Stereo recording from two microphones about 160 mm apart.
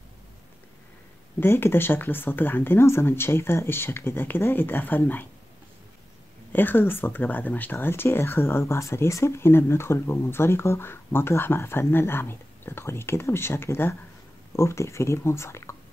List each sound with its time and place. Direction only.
1.4 s speech: 15° left (ahead or behind)
6.5 s speech: 10° left (ahead or behind)